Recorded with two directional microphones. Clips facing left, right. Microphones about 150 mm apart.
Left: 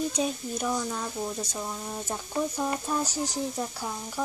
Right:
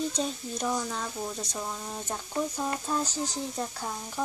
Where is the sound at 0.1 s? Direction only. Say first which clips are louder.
Left 3 dB; 5° left (ahead or behind).